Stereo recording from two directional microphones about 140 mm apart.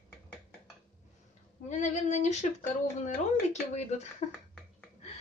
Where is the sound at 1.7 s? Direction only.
55° left (ahead or behind).